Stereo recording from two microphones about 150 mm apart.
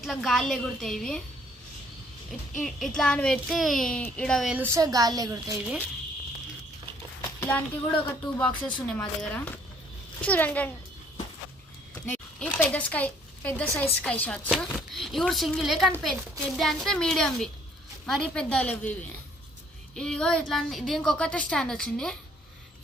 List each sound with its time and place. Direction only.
0.0 s a woman's voice: centre (ahead or behind)
2.6 s a woman's voice: centre (ahead or behind)
4.5 s a child's voice: 15° right (ahead or behind)
7.3 s speech: 15° left (ahead or behind)
12.1 s a woman's voice: 10° left (ahead or behind)
20.0 s a woman's voice: 5° left (ahead or behind)